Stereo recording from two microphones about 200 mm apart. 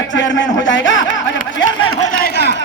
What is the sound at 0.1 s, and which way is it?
Speech, 65° left (ahead or behind).